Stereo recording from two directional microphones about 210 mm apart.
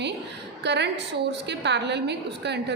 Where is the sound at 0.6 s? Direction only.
55° right (ahead or behind).